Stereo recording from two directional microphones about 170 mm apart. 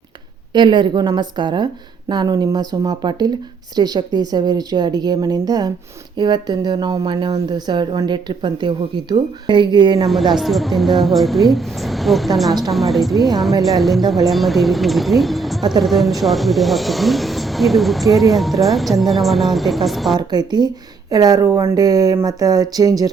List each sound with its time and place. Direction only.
0.5 s a woman's voice: 25° right (ahead or behind)
10.3 s speech: centre (ahead or behind)
20.1 s a woman's voice: 25° right (ahead or behind)